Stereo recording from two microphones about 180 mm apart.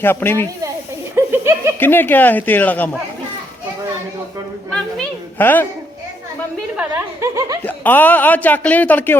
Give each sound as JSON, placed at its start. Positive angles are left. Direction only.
{"t": 0.0, "sound": "speech", "side_deg": 10}
{"t": 1.1, "sound": "a sound", "side_deg": -15}
{"t": 1.8, "sound": "speech", "side_deg": 10}
{"t": 4.7, "sound": "a sound", "side_deg": 10}
{"t": 6.7, "sound": "chuckle", "side_deg": -15}
{"t": 7.6, "sound": "speech", "side_deg": 10}